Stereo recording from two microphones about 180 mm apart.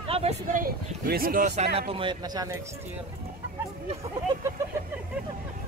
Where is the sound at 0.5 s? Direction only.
55° right (ahead or behind).